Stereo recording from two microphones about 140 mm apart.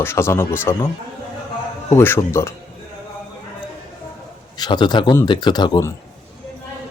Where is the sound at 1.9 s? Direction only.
15° left (ahead or behind).